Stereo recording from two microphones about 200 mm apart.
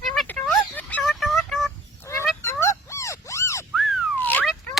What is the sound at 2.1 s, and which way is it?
Fowl, 15° left (ahead or behind).